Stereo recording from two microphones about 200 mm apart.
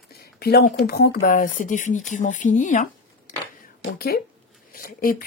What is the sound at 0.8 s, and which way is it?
Speech, 50° left (ahead or behind).